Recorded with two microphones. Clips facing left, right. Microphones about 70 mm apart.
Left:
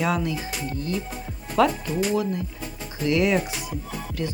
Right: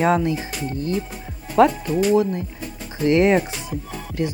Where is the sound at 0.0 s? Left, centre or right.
Right.